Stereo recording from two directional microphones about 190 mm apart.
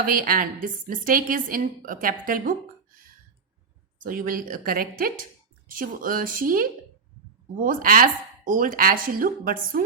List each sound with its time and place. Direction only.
0.0 s speech: 50° right (ahead or behind)
4.0 s speech: 50° right (ahead or behind)